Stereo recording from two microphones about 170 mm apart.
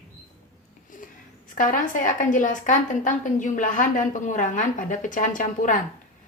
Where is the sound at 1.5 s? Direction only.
55° left (ahead or behind).